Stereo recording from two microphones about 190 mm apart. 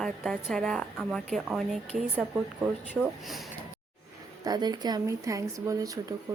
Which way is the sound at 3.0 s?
Centre (ahead or behind).